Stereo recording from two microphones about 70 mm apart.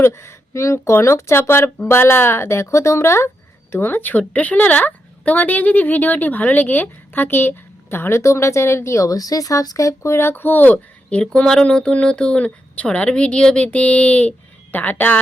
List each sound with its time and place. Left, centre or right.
0.0 s a woman's voice: left